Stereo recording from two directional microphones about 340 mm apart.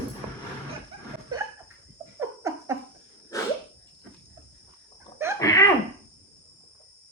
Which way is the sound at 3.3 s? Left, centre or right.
Centre.